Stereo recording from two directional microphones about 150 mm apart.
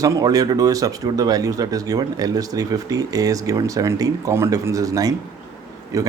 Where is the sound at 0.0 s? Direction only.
25° right (ahead or behind).